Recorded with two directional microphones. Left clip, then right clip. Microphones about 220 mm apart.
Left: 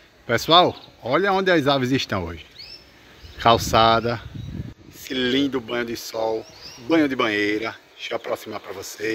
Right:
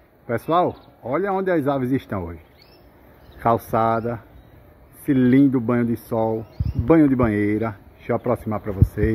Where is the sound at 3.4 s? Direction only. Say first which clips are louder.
Left 3 dB; 10° left (ahead or behind).